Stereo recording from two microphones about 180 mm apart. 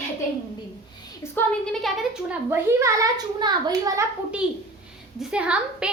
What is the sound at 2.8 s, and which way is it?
A child's voice, 20° right (ahead or behind).